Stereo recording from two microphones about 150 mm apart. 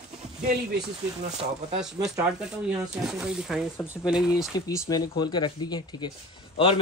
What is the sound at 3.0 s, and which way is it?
Speech, 5° right (ahead or behind).